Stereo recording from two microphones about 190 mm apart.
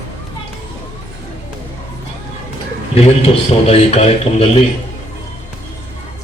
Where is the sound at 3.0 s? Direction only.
30° left (ahead or behind).